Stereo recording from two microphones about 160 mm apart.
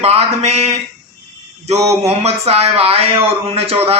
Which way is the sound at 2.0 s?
40° right (ahead or behind).